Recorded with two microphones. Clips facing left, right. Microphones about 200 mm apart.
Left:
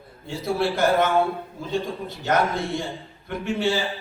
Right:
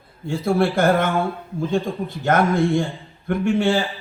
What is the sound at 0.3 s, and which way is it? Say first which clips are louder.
A man's voice: right 5 dB; 50° right (ahead or behind).